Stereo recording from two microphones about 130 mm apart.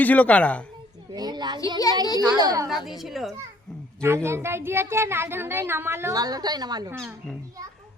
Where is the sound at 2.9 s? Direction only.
Centre (ahead or behind).